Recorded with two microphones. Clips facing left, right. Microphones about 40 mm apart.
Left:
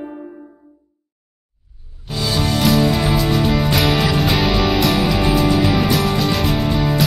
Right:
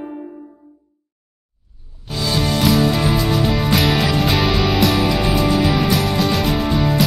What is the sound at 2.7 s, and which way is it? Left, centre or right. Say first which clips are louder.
Music: left 1 dB; centre.